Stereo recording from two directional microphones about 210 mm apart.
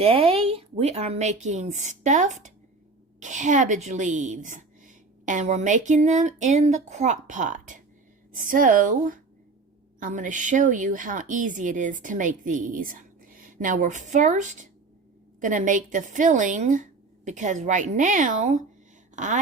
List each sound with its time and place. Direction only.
0.0 s a woman's voice: 25° right (ahead or behind)